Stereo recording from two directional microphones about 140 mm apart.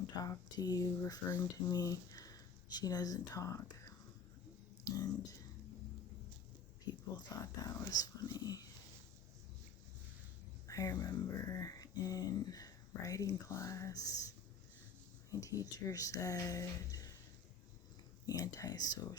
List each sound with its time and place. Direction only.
0.2 s speech: 25° left (ahead or behind)
7.2 s speech: 25° left (ahead or behind)
10.7 s speech: 25° left (ahead or behind)
18.3 s speech: 25° left (ahead or behind)